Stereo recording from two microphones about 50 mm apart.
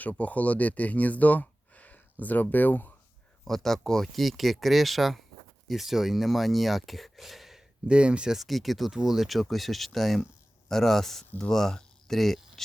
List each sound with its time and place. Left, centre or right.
0.0 s speech: left
3.4 s speech: centre
7.9 s speech: right
8.3 s speech: centre